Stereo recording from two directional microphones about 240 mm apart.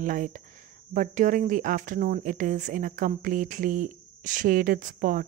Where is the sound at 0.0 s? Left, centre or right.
Right.